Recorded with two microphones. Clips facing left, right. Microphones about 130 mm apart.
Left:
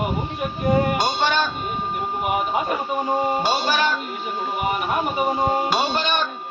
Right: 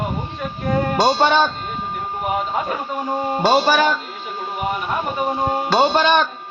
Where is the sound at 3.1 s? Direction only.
10° left (ahead or behind).